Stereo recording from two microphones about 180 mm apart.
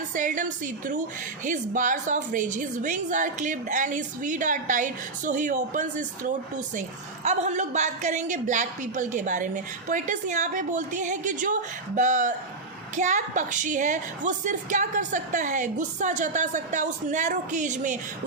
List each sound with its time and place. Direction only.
0.1 s a woman's voice: 45° right (ahead or behind)